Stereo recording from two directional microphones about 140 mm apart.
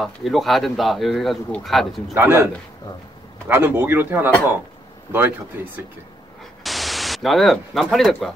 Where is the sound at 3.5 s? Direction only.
15° right (ahead or behind).